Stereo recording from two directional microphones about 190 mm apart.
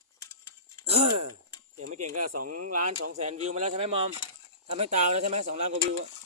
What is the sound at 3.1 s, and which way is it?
Speech, 40° right (ahead or behind).